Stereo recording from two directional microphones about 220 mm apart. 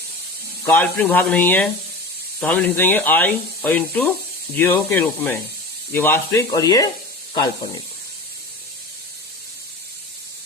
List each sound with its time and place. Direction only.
0.6 s speech: 10° left (ahead or behind)